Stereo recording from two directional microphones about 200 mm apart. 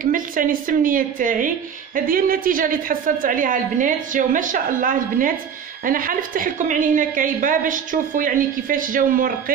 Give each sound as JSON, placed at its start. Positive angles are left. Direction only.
{"t": 0.0, "sound": "a woman's voice", "side_deg": -45}